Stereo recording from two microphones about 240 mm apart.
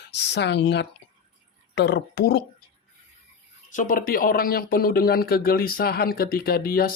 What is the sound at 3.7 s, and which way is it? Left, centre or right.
Speech, left.